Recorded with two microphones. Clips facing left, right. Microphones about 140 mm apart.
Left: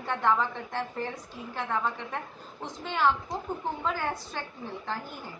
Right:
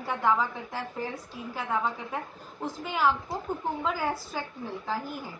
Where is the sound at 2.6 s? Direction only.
5° right (ahead or behind).